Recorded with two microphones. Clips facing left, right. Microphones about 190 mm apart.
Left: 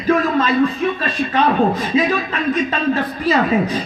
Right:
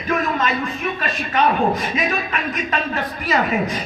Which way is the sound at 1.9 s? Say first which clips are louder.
Left 5 dB; 30° left (ahead or behind).